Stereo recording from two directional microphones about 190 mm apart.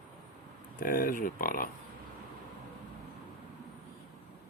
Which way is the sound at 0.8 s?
50° left (ahead or behind).